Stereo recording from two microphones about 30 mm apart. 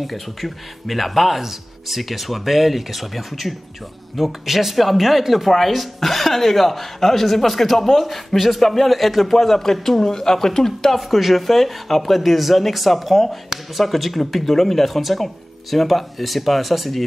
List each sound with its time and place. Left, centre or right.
0.0 s a man's voice: centre
11.0 s speech: centre